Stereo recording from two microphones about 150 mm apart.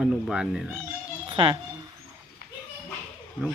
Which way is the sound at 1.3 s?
35° right (ahead or behind).